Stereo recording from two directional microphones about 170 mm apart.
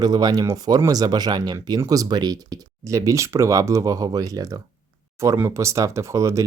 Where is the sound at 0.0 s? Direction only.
20° right (ahead or behind).